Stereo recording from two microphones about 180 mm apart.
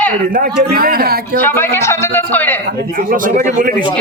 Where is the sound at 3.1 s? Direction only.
50° right (ahead or behind).